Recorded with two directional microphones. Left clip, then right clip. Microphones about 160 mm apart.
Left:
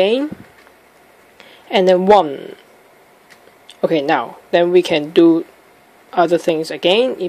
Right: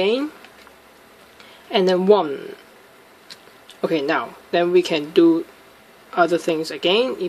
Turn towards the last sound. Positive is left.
turn(degrees=20)  # may be behind; listen again after turning